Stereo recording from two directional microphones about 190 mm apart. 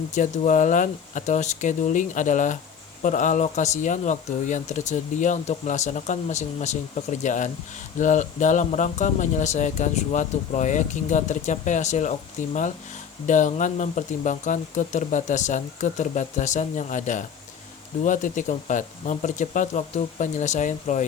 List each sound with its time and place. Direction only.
0.1 s speech: 40° left (ahead or behind)